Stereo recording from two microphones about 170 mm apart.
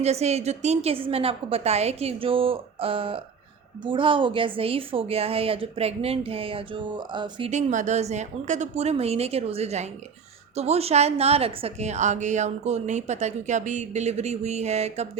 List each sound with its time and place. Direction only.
0.0 s a woman's voice: 40° right (ahead or behind)
7.5 s a woman's voice: 45° right (ahead or behind)